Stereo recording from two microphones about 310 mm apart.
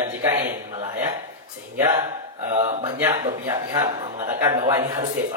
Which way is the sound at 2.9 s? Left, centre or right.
Centre.